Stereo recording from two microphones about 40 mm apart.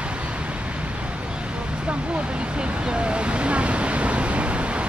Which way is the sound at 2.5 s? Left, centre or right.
Right.